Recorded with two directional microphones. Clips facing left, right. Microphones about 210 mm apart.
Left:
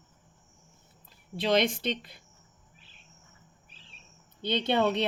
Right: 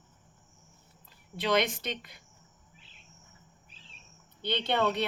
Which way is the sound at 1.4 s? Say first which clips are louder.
Left 3 dB; 30° left (ahead or behind).